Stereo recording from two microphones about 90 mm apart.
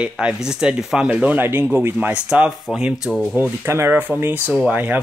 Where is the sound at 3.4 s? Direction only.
25° right (ahead or behind).